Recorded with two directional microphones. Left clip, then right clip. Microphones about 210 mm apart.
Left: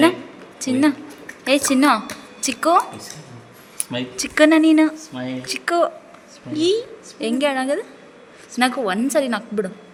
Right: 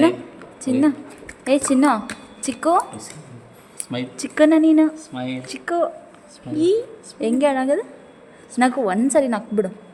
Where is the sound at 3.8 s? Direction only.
20° right (ahead or behind).